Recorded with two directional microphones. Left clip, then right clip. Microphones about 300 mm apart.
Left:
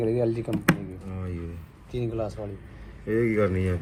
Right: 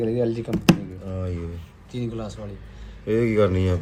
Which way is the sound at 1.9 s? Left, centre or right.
Centre.